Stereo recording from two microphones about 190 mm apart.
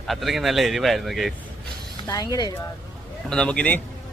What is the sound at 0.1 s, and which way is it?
A woman's voice, centre (ahead or behind).